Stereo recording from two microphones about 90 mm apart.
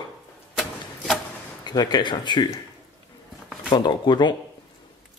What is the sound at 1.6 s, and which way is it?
Speech, 50° left (ahead or behind).